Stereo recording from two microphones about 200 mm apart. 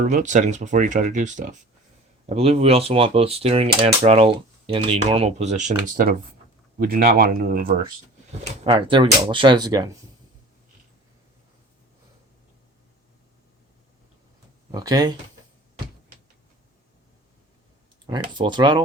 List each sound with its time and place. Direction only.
0.0 s speech: 40° right (ahead or behind)
8.6 s speech: 25° right (ahead or behind)
14.7 s speech: 20° right (ahead or behind)
18.0 s speech: 25° right (ahead or behind)